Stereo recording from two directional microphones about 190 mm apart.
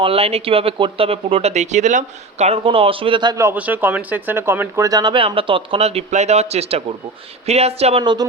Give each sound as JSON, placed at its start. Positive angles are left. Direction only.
{"t": 0.0, "sound": "speech", "side_deg": -30}